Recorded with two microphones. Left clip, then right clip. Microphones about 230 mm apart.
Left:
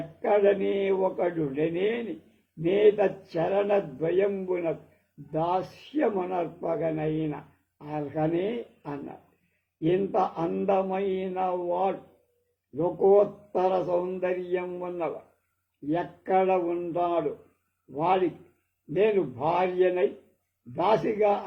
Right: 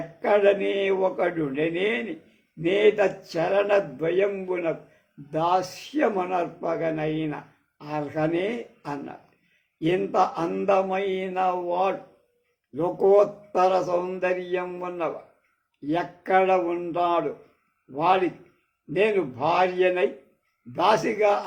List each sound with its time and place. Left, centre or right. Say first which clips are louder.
0.2 s a man's voice: right 3 dB; right
10.2 s mantra: right 3 dB; right
12.7 s a man's voice: right 2 dB; right
17.9 s mantra: right 3 dB; right
20.7 s a man's voice: right 3 dB; right